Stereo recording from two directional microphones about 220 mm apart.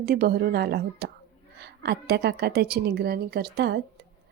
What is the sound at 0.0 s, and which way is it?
Speech, 45° right (ahead or behind).